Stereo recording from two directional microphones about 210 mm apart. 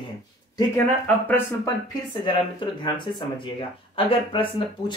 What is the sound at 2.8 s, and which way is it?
Speech, 20° left (ahead or behind).